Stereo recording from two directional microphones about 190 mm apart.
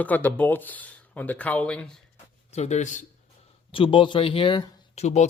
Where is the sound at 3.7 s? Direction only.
25° left (ahead or behind).